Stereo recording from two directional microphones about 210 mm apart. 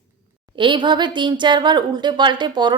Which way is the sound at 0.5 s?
25° right (ahead or behind).